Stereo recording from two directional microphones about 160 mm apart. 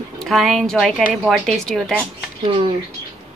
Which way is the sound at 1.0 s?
10° right (ahead or behind).